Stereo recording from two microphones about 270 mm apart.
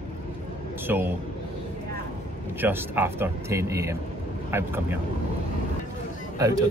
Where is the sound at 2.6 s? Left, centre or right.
Centre.